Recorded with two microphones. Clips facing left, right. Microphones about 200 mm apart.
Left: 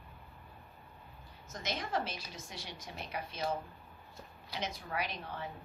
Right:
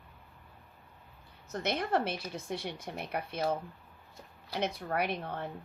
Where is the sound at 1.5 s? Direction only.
60° right (ahead or behind).